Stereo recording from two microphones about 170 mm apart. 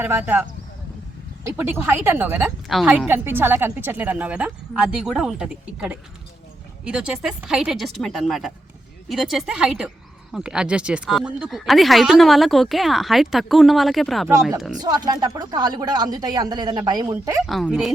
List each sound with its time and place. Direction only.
0.0 s a woman's voice: 10° right (ahead or behind)
1.5 s a woman's voice: 10° right (ahead or behind)
14.8 s speech: 25° right (ahead or behind)
17.4 s a woman's voice: centre (ahead or behind)